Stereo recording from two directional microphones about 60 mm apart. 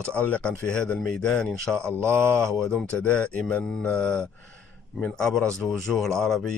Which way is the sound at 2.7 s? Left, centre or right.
Centre.